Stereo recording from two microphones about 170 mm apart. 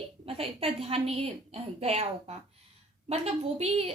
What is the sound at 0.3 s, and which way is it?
A woman's voice, 35° right (ahead or behind).